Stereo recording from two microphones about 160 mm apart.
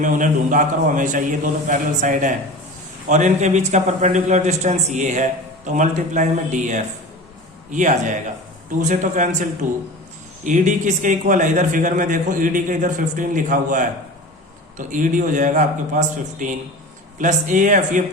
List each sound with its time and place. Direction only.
0.0 s a man's voice: 55° right (ahead or behind)